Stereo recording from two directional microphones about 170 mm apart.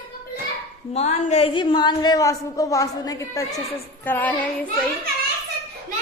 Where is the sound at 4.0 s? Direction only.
10° left (ahead or behind).